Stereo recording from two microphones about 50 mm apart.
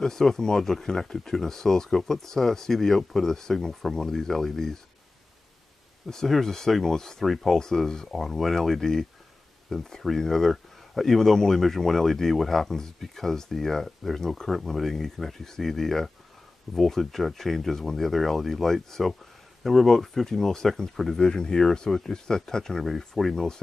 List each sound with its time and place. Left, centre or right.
0.0 s speech: centre
6.0 s speech: centre